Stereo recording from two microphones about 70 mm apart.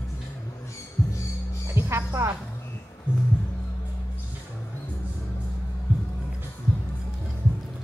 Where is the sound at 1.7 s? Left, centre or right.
Right.